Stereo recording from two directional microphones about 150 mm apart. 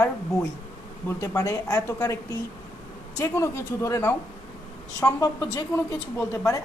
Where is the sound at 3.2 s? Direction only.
20° left (ahead or behind).